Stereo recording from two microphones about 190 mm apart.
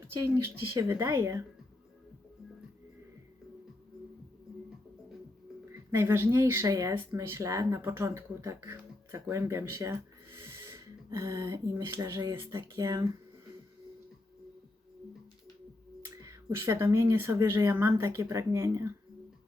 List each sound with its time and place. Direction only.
0.4 s speech: 15° right (ahead or behind)
5.9 s speech: 15° right (ahead or behind)
16.0 s speech: 15° right (ahead or behind)